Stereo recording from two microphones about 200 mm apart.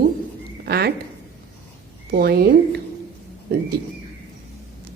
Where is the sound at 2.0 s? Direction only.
50° right (ahead or behind).